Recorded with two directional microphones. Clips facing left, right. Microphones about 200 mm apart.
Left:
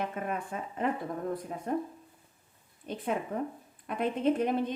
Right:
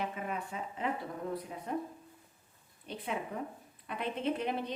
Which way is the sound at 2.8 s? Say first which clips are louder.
Left 5 dB; 50° left (ahead or behind).